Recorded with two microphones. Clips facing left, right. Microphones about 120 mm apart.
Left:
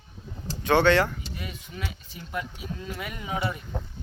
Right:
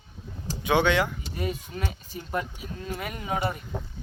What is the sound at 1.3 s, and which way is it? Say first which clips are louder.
Speech: right 7 dB; 40° right (ahead or behind).